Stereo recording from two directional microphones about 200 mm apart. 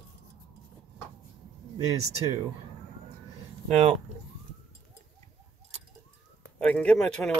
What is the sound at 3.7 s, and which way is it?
Speech, 30° right (ahead or behind).